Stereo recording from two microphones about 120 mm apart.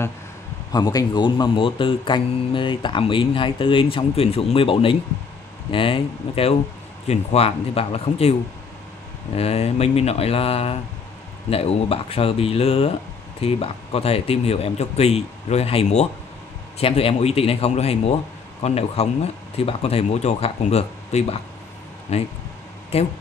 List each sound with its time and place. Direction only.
0.7 s speech: 30° left (ahead or behind); by 23.1 s 60° left (ahead or behind)